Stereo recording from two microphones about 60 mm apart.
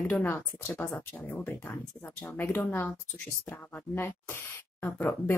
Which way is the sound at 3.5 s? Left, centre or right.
Left.